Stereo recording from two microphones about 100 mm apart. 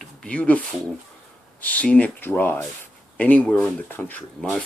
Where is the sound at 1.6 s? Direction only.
15° left (ahead or behind).